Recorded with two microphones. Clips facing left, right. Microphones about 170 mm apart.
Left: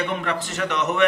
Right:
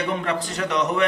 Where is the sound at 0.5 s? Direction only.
35° right (ahead or behind).